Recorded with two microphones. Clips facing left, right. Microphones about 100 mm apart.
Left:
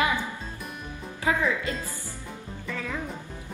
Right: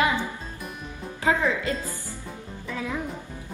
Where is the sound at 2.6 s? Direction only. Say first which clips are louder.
Right 3 dB; 10° right (ahead or behind).